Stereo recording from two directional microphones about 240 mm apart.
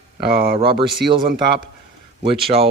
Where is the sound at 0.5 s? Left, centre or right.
Right.